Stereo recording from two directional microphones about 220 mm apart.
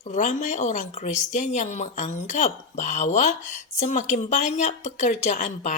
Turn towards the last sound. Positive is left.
turn(degrees=35)  # may be behind; listen again after turning